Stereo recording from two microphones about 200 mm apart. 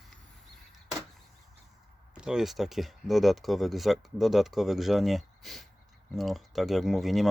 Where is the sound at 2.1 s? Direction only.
5° right (ahead or behind).